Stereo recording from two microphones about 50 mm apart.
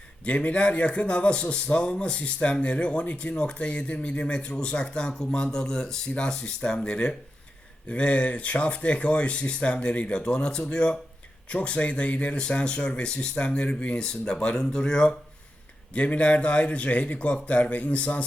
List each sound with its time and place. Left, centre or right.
0.3 s a man's voice: left
15.9 s a man's voice: left